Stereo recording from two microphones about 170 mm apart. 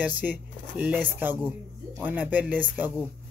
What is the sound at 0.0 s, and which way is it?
Speech, 10° right (ahead or behind).